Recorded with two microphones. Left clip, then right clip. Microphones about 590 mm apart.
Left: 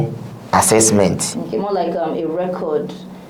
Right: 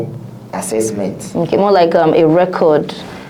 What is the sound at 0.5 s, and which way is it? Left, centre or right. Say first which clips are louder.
Speech: left 5 dB; left.